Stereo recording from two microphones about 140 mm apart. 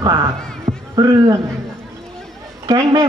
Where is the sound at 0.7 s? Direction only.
40° right (ahead or behind).